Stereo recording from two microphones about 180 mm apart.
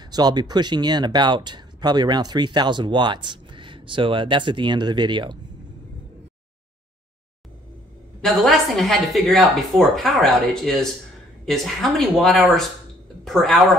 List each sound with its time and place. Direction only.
0.0 s speech: 20° right (ahead or behind)
8.2 s a woman's voice: centre (ahead or behind)